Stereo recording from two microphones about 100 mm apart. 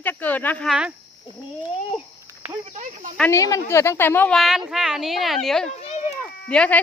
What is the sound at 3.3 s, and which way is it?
Speech, 35° left (ahead or behind).